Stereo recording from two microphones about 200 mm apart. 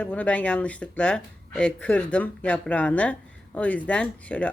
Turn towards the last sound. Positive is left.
turn(degrees=5)  # may be behind; listen again after turning